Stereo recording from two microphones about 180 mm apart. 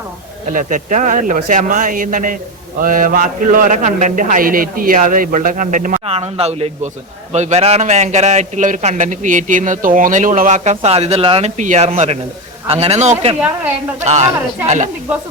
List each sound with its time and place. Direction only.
0.5 s a man's voice: 45° right (ahead or behind)
6.1 s a man's voice: 35° right (ahead or behind)